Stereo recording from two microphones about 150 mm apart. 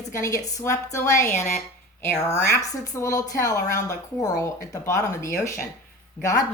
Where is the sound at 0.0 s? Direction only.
20° left (ahead or behind).